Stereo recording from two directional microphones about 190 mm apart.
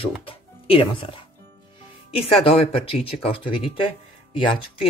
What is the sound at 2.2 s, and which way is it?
Speech, 30° left (ahead or behind).